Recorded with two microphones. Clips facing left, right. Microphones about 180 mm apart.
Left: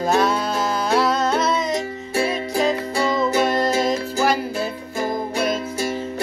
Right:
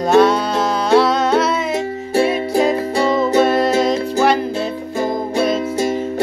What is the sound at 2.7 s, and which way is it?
Music, 25° right (ahead or behind).